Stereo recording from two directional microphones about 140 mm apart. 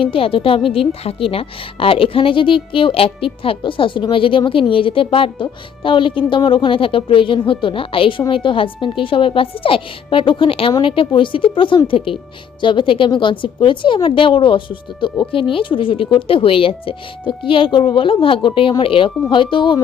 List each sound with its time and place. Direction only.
0.0 s a woman's voice: 40° left (ahead or behind)